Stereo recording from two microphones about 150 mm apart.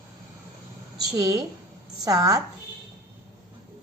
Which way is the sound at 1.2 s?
25° right (ahead or behind).